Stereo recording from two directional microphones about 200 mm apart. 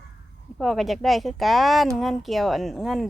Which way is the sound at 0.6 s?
Centre (ahead or behind).